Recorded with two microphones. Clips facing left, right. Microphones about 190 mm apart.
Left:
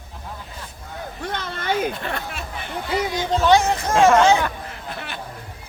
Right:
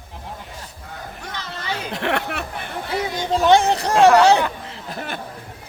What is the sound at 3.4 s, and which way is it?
Speech, 30° right (ahead or behind).